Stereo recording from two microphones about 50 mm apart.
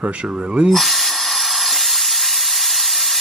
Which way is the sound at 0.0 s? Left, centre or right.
Right.